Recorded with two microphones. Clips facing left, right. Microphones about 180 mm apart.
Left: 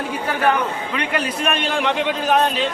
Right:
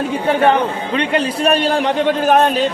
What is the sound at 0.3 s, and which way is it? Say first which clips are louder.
A man's voice: right 6 dB; 25° right (ahead or behind).